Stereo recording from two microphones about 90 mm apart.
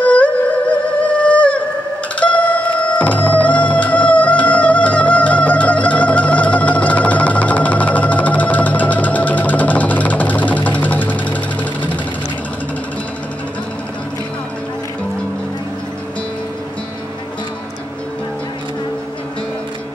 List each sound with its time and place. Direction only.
0.0 s humming: 15° left (ahead or behind)
2.1 s music: 15° left (ahead or behind)